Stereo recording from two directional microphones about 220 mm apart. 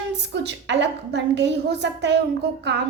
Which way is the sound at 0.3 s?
55° right (ahead or behind).